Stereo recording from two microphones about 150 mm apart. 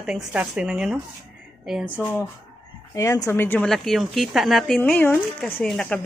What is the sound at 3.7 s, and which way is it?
A woman's voice, centre (ahead or behind).